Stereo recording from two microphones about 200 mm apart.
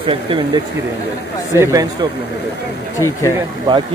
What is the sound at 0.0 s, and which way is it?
Speech, 25° right (ahead or behind).